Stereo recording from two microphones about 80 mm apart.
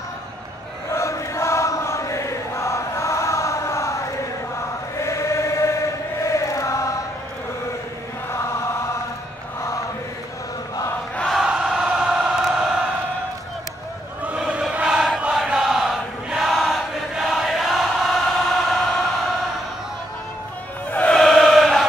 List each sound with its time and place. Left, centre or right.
0.9 s chant: left
5.0 s choir: left
6.2 s chant: left
8.3 s chant: left
11.2 s a sound: centre
14.2 s choir: centre
15.1 s chant: centre
20.9 s music: centre
21.2 s choir: centre